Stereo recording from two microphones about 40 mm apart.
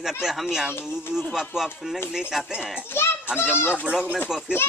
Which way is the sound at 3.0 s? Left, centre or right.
Left.